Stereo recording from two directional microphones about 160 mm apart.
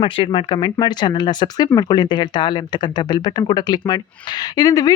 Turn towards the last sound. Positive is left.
turn(degrees=20)  # may be behind; listen again after turning